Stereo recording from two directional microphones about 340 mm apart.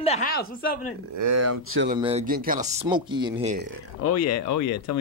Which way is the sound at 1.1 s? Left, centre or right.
Right.